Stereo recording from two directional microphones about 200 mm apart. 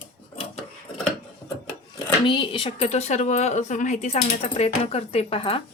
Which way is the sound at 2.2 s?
25° left (ahead or behind).